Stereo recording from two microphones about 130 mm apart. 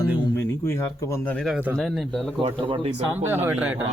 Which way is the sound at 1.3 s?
Centre (ahead or behind).